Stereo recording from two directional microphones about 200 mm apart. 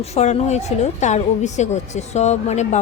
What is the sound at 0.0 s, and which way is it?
A woman's voice, 35° left (ahead or behind).